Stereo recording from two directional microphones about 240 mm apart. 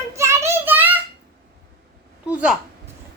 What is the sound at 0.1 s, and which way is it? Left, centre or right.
Child singing, centre.